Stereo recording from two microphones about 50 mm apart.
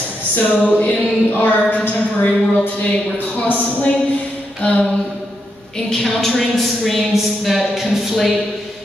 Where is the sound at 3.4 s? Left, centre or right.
Left.